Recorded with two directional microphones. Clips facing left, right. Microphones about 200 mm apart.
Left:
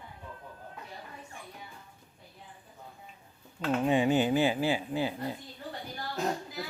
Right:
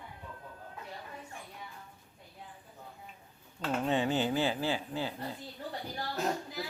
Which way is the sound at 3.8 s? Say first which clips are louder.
Left 5 dB; 15° left (ahead or behind).